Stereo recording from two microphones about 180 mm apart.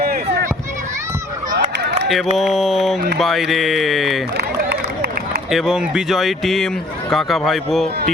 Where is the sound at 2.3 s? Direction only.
Centre (ahead or behind).